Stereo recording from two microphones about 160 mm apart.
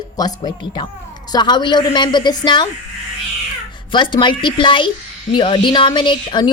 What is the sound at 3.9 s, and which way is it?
A woman's voice, 30° left (ahead or behind).